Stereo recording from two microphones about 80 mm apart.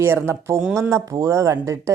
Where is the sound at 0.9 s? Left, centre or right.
Right.